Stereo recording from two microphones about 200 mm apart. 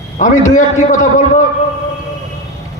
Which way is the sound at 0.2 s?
40° left (ahead or behind).